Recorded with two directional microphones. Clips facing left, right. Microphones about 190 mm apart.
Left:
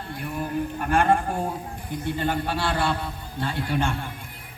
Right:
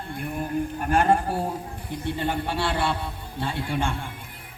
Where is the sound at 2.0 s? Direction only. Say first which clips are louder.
Left 1 dB; 25° right (ahead or behind).